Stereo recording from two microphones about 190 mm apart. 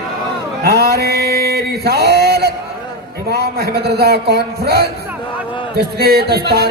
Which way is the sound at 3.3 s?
55° right (ahead or behind).